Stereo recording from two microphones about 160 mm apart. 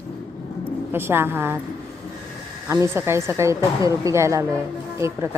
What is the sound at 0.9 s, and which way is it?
Speech, 15° right (ahead or behind).